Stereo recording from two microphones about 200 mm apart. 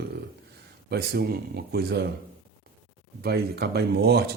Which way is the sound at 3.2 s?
55° right (ahead or behind).